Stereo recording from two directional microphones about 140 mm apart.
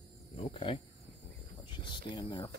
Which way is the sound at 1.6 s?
35° left (ahead or behind).